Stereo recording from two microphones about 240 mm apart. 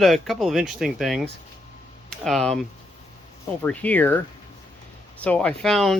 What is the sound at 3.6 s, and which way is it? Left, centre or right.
Speech, centre.